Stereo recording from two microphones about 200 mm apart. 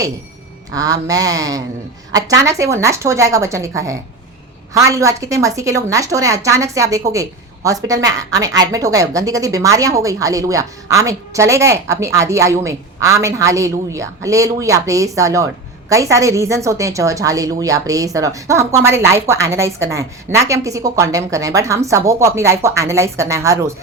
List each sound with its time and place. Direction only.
0.7 s a woman's voice: 20° right (ahead or behind)